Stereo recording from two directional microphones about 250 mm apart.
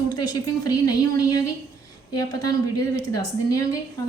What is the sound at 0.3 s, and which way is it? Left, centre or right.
A woman's voice, centre.